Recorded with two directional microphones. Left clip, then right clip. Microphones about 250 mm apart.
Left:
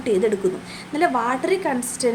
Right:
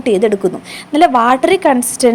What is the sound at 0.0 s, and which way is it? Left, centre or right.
A woman's voice, right.